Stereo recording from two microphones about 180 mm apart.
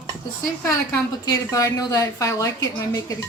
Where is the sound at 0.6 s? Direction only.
15° left (ahead or behind).